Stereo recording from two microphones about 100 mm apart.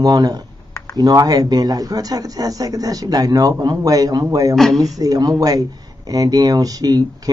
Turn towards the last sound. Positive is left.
turn(degrees=-40)  # may be behind; listen again after turning